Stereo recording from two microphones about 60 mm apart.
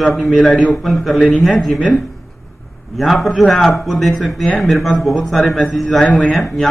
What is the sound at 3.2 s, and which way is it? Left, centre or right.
A man's voice, centre.